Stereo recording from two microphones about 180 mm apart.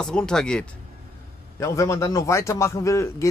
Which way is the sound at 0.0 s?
5° left (ahead or behind).